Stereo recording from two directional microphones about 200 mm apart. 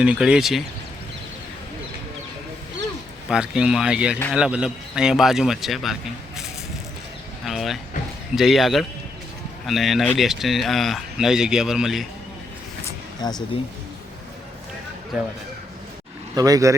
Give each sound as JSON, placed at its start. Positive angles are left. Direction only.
{"t": 0.0, "sound": "speech", "side_deg": -5}
{"t": 3.2, "sound": "speech", "side_deg": -5}
{"t": 7.4, "sound": "speech", "side_deg": 0}
{"t": 13.2, "sound": "speech", "side_deg": 20}
{"t": 16.3, "sound": "speech", "side_deg": -15}